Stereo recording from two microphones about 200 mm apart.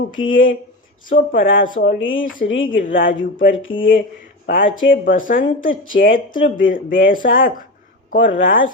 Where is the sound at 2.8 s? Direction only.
45° left (ahead or behind).